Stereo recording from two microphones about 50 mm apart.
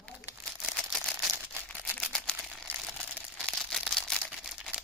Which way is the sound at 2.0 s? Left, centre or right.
Left.